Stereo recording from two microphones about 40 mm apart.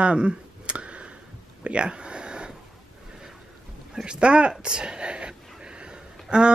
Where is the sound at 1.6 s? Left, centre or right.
Right.